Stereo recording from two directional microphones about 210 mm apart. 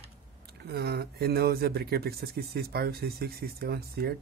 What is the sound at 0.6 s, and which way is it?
Speech, 50° right (ahead or behind).